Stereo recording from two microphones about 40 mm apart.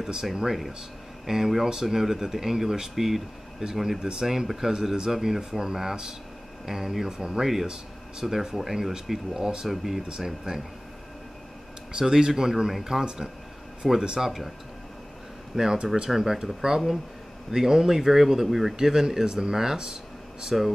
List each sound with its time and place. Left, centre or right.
1.2 s speech: centre
9.7 s speech: centre
10.0 s speech: centre
11.9 s speech: centre
15.5 s speech: centre